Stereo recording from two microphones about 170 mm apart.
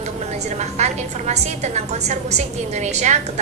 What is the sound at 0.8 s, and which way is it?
A woman's voice, 40° right (ahead or behind).